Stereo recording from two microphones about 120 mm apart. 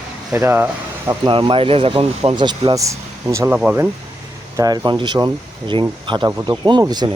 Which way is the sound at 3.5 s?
10° right (ahead or behind).